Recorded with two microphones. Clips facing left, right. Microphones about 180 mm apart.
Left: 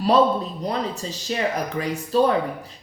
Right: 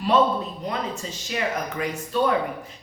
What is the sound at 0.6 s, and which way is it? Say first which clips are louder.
A woman's voice: left 3 dB; 35° left (ahead or behind).